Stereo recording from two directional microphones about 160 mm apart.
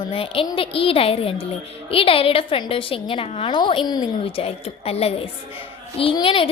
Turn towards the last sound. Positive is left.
turn(degrees=30)  # may be behind; listen again after turning